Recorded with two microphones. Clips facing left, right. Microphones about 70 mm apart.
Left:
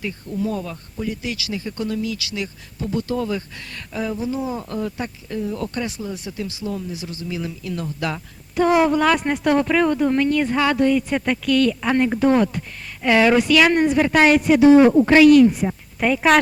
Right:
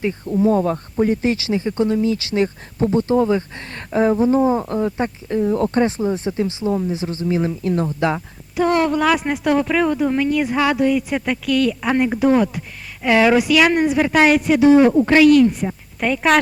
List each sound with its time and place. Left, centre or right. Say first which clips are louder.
0.0 s speech: right 8 dB; right
8.7 s speech: left 1 dB; centre